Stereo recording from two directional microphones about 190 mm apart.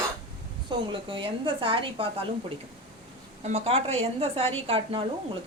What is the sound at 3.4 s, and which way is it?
A woman's voice, 35° right (ahead or behind).